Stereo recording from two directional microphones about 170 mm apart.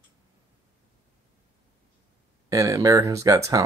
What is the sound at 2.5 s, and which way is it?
Speech, 20° right (ahead or behind).